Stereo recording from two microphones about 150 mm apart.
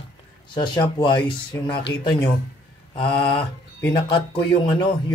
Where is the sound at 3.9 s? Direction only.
30° left (ahead or behind).